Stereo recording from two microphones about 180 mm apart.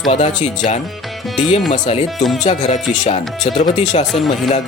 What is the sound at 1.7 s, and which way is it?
Speech, 40° left (ahead or behind).